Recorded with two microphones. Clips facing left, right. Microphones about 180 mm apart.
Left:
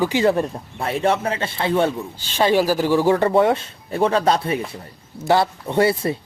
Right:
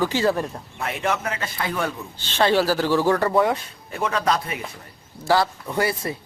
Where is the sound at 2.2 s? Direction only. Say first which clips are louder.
Left 2 dB; 10° left (ahead or behind).